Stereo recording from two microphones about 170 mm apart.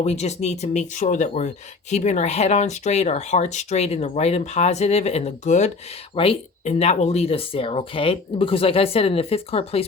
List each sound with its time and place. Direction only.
0.0 s speech: 40° left (ahead or behind)